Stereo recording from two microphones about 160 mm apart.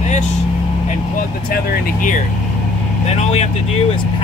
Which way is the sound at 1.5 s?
60° left (ahead or behind).